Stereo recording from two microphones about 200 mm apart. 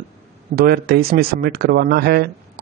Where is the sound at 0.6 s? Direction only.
50° right (ahead or behind).